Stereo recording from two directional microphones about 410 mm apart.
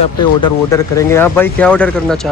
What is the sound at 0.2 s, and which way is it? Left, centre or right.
A man's voice, centre.